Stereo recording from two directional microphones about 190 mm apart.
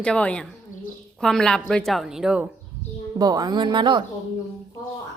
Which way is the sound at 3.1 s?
20° right (ahead or behind).